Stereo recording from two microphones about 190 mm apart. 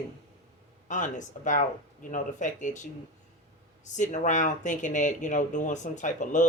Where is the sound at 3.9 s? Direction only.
40° left (ahead or behind).